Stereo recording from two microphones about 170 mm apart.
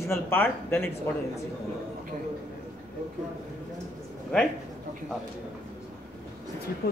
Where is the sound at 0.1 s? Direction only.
15° left (ahead or behind).